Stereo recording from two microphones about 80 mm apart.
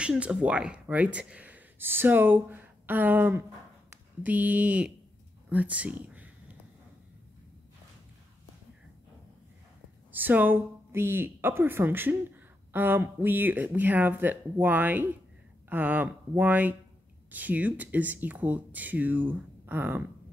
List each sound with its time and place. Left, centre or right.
0.0 s speech: centre
10.1 s speech: right